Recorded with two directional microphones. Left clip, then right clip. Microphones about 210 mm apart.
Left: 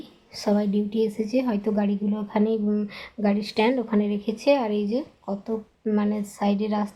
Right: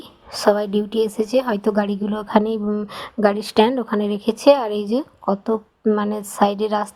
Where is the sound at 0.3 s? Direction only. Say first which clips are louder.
Right 8 dB; 30° right (ahead or behind).